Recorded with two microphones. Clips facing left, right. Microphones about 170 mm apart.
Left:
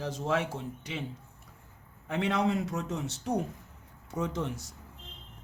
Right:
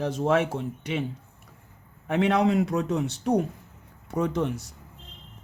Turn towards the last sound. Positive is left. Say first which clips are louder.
# right 7 dB
turn(degrees=-65)  # may be behind; listen again after turning